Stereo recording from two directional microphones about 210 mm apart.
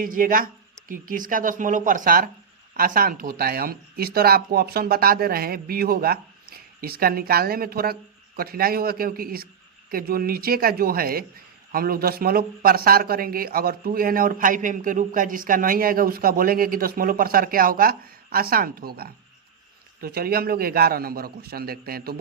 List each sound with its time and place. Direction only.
0.0 s speech: 40° right (ahead or behind)